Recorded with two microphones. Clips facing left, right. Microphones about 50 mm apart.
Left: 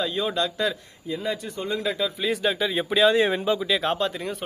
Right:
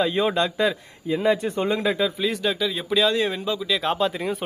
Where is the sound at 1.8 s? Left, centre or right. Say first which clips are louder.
Right 1 dB; right.